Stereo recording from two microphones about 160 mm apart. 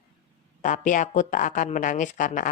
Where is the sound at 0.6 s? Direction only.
50° left (ahead or behind).